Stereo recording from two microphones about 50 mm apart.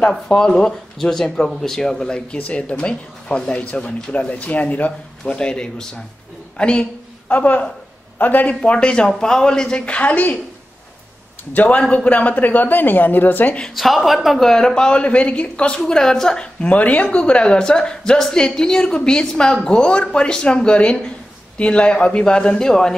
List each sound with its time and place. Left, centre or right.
0.3 s a woman's voice: centre; by 4.9 s left
5.2 s a woman's voice: centre; by 8.5 s left
8.5 s speech: left
11.5 s a woman's voice: left
13.7 s a woman's voice: centre
14.5 s speech: centre
15.8 s a woman's voice: centre
16.6 s a woman's voice: left; by 22.9 s centre